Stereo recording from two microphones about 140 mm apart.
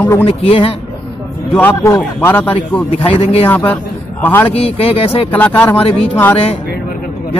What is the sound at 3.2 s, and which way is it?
Speech, 45° left (ahead or behind).